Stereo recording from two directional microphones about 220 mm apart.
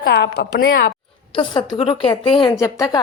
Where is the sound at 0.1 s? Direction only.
50° left (ahead or behind).